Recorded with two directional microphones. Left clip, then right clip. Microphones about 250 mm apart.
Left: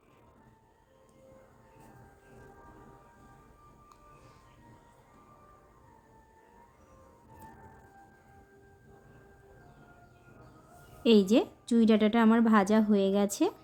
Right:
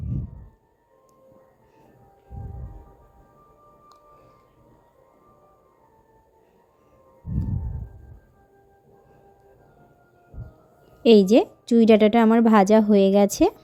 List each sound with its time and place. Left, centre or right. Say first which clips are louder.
11.0 s a woman's voice: right 9 dB; right